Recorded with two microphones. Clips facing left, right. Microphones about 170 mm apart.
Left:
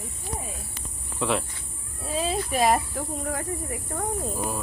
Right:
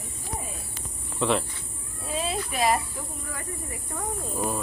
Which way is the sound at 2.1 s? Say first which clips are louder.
Left 3 dB; 35° left (ahead or behind).